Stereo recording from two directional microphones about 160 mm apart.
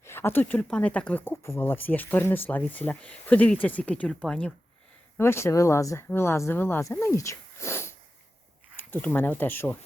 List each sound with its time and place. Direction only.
0.0 s speech: 15° left (ahead or behind)
5.1 s speech: 15° left (ahead or behind)